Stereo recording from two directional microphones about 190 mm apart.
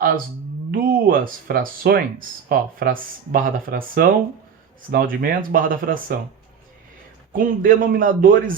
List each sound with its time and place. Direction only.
0.7 s speech: 50° right (ahead or behind)
7.3 s speech: 45° right (ahead or behind)